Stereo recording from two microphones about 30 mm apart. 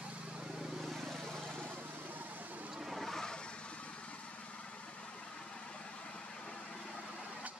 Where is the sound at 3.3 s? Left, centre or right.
Left.